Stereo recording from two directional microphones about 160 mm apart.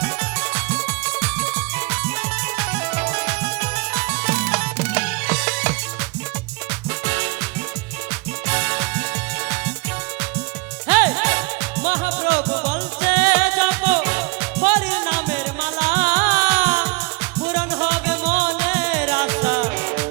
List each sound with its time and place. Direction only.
0.0 s music: 5° right (ahead or behind)
7.0 s music: 5° right (ahead or behind)
8.4 s music: 5° right (ahead or behind)
10.8 s music: 10° right (ahead or behind)